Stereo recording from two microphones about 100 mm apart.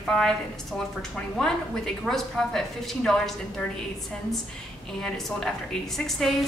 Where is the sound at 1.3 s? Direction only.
5° left (ahead or behind).